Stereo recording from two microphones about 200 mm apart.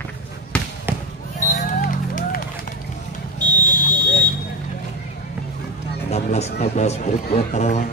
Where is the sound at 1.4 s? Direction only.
40° left (ahead or behind).